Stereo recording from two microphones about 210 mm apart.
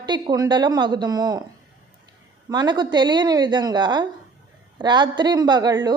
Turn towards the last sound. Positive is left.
turn(degrees=-20)  # may be behind; listen again after turning